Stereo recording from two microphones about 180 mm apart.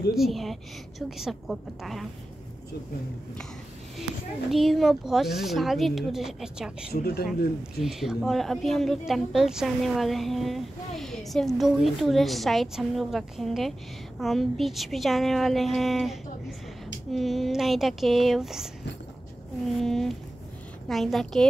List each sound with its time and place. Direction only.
0.2 s a woman's voice: centre (ahead or behind)
4.5 s a woman's voice: centre (ahead or behind)
6.9 s speech: 60° left (ahead or behind)
7.8 s a woman's voice: centre (ahead or behind)
19.8 s a woman's voice: centre (ahead or behind)